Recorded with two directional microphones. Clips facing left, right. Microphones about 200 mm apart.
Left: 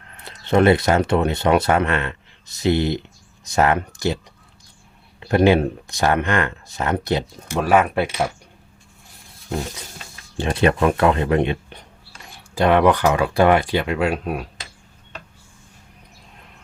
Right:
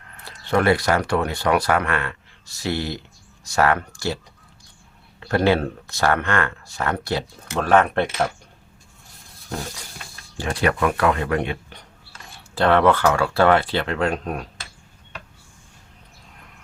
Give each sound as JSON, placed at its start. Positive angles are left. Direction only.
{"t": 0.3, "sound": "speech", "side_deg": 20}
{"t": 5.2, "sound": "speech", "side_deg": 15}
{"t": 10.3, "sound": "speech", "side_deg": 25}